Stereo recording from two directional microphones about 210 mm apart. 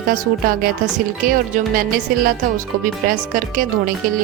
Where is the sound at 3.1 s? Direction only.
40° right (ahead or behind).